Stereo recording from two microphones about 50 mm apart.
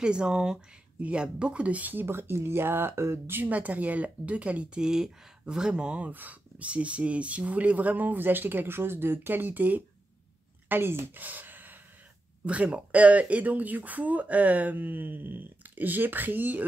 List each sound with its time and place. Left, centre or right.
0.0 s speech: centre; by 2.0 s right
2.0 s speech: right
3.4 s speech: right
4.8 s speech: centre; by 9.8 s right
10.7 s speech: right
11.1 s a sound: right
12.4 s speech: right